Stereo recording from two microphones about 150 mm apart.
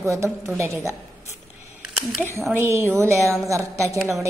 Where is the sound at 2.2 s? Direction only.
15° right (ahead or behind).